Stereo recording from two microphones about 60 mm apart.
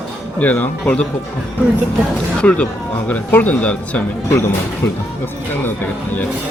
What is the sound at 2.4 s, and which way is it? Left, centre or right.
Speech, centre.